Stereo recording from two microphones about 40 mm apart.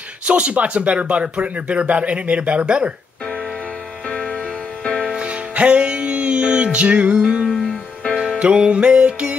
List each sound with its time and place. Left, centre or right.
0.3 s speech: right
5.0 s music: right
8.4 s speech: right